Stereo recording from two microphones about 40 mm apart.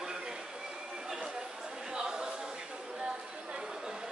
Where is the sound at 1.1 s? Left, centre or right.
Centre.